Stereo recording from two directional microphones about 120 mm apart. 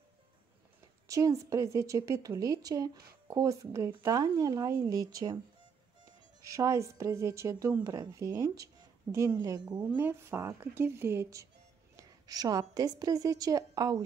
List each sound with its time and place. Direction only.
1.0 s a woman's voice: 25° right (ahead or behind)
6.4 s a woman's voice: 25° right (ahead or behind)
9.8 s a woman's voice: 20° right (ahead or behind)